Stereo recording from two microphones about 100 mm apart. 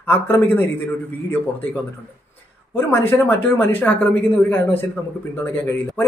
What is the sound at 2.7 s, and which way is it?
Speech, 20° left (ahead or behind).